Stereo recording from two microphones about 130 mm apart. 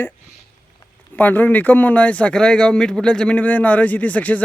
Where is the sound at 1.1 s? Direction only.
15° left (ahead or behind).